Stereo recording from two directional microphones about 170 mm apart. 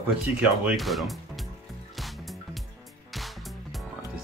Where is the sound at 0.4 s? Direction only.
5° right (ahead or behind).